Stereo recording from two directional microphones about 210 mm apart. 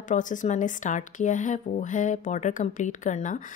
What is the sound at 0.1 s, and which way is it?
Speech, 35° left (ahead or behind).